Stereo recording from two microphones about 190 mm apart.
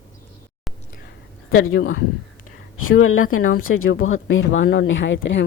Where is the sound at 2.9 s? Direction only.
90° left.